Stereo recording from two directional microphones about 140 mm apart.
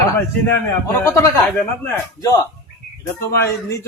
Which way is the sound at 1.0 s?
20° left (ahead or behind).